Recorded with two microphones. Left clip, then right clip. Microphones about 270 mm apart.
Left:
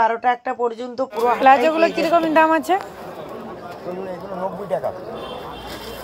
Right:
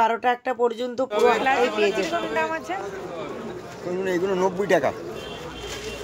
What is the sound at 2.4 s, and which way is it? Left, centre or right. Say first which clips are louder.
Speech: left 10 dB; left.